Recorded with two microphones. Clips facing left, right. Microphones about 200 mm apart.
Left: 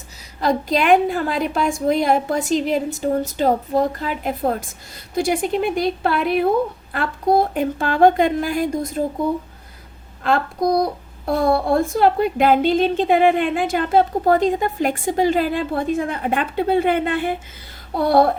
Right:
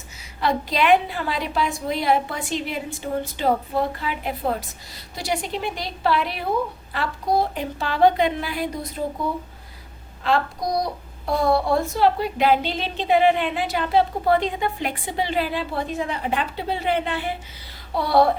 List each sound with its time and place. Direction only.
0.3 s a woman's voice: 45° left (ahead or behind)
10.2 s child singing: 55° left (ahead or behind)
11.3 s a woman's voice: 55° left (ahead or behind)